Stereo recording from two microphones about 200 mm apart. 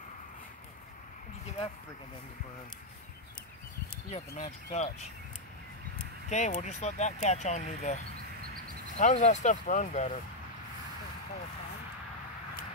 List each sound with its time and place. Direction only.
4.1 s speech: 35° left (ahead or behind)
6.2 s speech: 35° left (ahead or behind)